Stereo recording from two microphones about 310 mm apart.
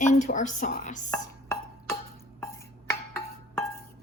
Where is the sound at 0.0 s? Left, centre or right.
Left.